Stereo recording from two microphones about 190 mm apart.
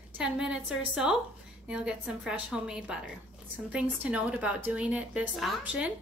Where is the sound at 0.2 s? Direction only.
5° right (ahead or behind).